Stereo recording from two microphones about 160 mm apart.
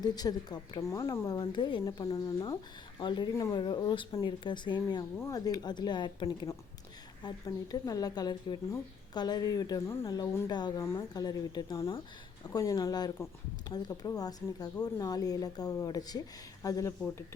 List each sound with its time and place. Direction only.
0.0 s speech: 25° left (ahead or behind)